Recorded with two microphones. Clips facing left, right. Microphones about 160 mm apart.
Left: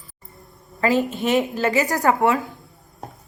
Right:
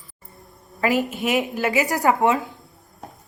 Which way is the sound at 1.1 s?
5° right (ahead or behind).